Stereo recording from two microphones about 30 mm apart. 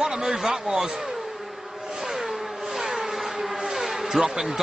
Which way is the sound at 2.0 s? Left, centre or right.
Centre.